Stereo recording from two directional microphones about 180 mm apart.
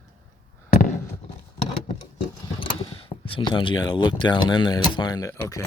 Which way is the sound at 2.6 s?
30° left (ahead or behind).